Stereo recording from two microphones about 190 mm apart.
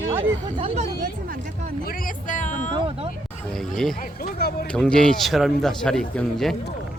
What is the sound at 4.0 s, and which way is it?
Speech, 50° left (ahead or behind).